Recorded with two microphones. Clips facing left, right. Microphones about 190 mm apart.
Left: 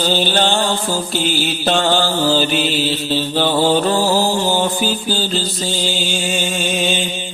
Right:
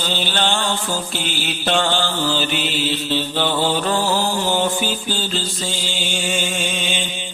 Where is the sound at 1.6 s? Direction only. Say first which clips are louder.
Left 3 dB; 35° left (ahead or behind).